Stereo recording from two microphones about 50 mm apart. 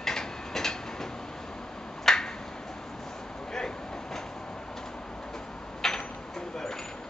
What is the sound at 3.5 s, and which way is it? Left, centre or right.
Vehicle, centre.